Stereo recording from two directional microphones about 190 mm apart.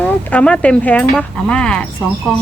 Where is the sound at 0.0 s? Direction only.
5° left (ahead or behind).